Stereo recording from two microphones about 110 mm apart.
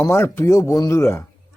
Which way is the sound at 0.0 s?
25° left (ahead or behind).